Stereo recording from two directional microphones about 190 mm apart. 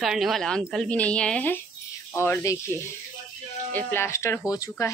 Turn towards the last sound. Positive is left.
turn(degrees=15)  # may be behind; listen again after turning